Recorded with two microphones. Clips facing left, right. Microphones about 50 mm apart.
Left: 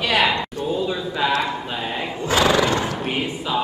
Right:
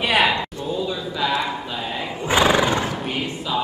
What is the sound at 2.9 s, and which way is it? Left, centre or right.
Thump, centre.